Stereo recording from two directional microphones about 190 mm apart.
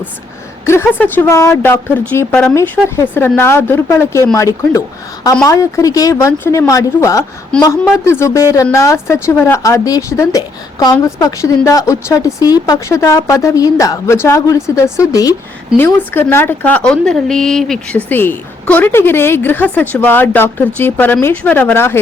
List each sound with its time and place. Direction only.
0.6 s a woman's voice: 15° left (ahead or behind)